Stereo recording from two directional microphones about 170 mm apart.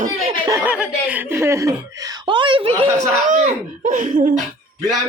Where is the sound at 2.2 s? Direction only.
30° right (ahead or behind).